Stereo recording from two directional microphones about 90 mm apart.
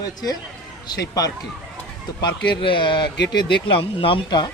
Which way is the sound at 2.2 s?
60° left (ahead or behind).